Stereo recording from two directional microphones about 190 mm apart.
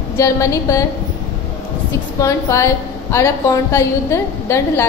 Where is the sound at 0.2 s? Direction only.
15° left (ahead or behind).